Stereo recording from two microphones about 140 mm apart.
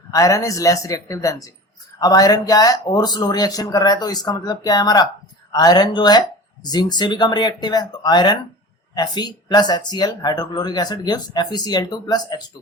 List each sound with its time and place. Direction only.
0.1 s speech: 25° left (ahead or behind)